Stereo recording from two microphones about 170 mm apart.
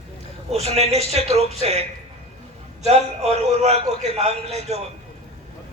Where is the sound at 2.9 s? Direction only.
40° right (ahead or behind).